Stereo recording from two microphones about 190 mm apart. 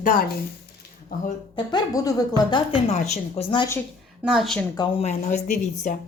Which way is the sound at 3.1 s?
30° left (ahead or behind).